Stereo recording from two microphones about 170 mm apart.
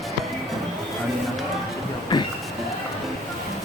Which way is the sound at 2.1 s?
25° left (ahead or behind).